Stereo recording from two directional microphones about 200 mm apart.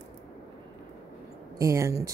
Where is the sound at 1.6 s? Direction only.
15° right (ahead or behind).